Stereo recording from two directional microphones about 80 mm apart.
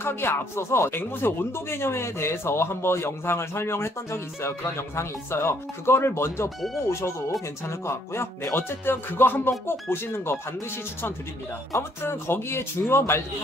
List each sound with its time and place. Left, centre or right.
0.0 s speech: left
7.6 s speech: left
11.7 s speech: left